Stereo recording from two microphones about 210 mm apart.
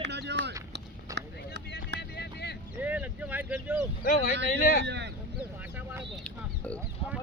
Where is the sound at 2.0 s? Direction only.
50° left (ahead or behind).